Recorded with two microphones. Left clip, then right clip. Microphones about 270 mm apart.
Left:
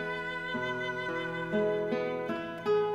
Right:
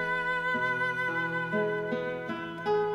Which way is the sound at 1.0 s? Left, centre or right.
Left.